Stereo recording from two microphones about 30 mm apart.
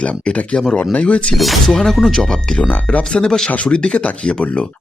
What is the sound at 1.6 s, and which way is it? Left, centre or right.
Speech, centre.